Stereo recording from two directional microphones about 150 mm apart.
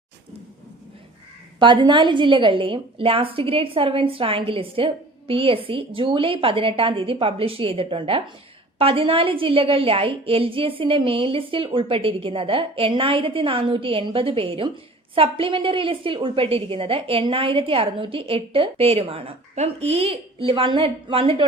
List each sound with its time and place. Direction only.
1.5 s a woman's voice: 30° right (ahead or behind)